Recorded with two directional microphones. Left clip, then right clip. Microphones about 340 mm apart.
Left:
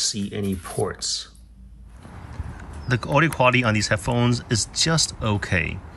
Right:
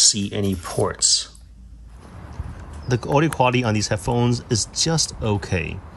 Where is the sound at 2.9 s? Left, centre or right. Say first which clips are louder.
Even; centre.